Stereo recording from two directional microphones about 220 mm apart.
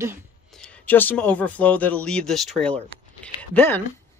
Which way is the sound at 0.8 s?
10° left (ahead or behind).